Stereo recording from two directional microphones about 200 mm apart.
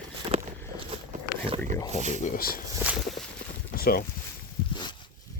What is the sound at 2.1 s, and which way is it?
Speech, 40° left (ahead or behind).